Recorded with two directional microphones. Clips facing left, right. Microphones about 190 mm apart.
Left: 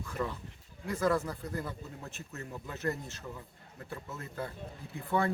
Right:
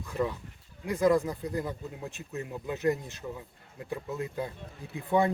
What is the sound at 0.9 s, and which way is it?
Speech, 15° right (ahead or behind).